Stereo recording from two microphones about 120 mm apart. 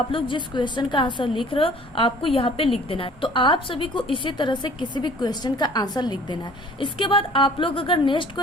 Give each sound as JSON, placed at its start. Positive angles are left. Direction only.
{"t": 0.1, "sound": "a woman's voice", "side_deg": 40}